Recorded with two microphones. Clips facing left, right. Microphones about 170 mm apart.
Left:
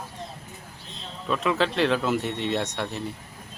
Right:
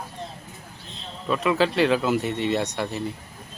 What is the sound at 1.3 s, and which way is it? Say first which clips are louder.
Speech: right 3 dB; centre (ahead or behind).